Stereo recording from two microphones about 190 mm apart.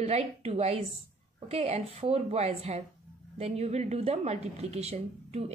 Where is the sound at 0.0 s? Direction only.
35° right (ahead or behind).